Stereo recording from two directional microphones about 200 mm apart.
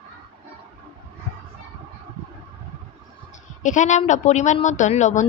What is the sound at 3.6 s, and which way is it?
A woman's voice, 40° left (ahead or behind).